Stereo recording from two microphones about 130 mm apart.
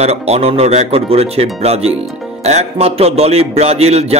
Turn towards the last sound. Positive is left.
turn(degrees=-55)  # may be behind; listen again after turning